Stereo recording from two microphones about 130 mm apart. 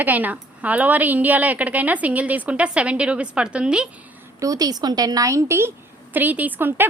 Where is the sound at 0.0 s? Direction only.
15° right (ahead or behind).